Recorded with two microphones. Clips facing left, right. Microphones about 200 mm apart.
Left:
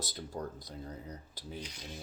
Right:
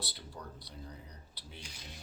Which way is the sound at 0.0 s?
45° left (ahead or behind).